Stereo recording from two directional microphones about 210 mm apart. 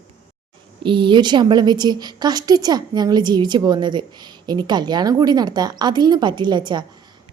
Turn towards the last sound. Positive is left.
turn(degrees=-20)  # may be behind; listen again after turning